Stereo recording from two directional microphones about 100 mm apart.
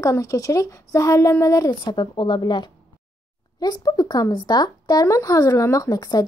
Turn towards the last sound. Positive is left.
turn(degrees=40)  # may be behind; listen again after turning